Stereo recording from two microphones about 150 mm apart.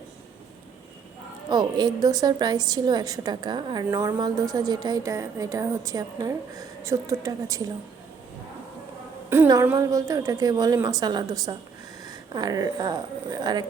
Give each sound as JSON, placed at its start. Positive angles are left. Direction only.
{"t": 1.5, "sound": "a woman's voice", "side_deg": -30}
{"t": 9.3, "sound": "a sound", "side_deg": -15}
{"t": 9.7, "sound": "a woman's voice", "side_deg": -20}